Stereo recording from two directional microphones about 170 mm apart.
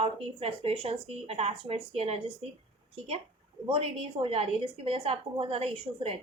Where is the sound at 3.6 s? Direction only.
35° right (ahead or behind).